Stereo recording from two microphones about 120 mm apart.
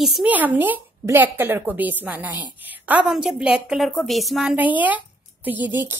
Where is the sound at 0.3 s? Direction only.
15° right (ahead or behind).